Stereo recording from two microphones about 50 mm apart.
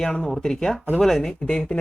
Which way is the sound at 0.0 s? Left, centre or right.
Centre.